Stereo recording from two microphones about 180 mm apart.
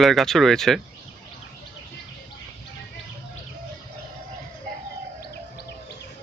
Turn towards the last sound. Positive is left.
turn(degrees=65)  # may be behind; listen again after turning